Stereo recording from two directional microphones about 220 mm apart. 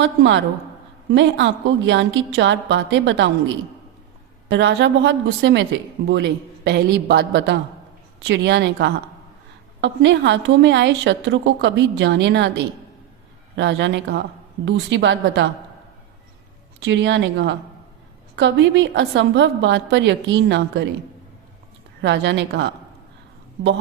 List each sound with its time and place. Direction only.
0.0 s a woman's voice: 55° right (ahead or behind)
13.6 s a woman's voice: 55° right (ahead or behind)
16.8 s a woman's voice: 55° right (ahead or behind)
22.0 s a woman's voice: 50° right (ahead or behind)